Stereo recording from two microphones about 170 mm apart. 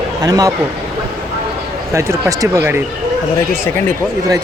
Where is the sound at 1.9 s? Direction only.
15° right (ahead or behind).